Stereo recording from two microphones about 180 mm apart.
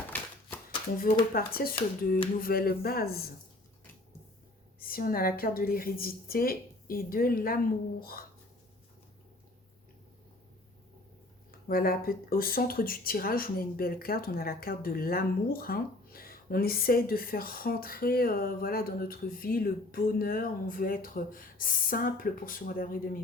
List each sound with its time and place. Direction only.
0.1 s shuffling cards: 10° left (ahead or behind)
0.9 s a woman's voice: 55° left (ahead or behind)
4.8 s a woman's voice: 55° left (ahead or behind)
11.7 s speech: 55° left (ahead or behind)